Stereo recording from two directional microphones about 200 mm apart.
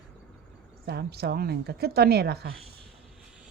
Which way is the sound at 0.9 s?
55° right (ahead or behind).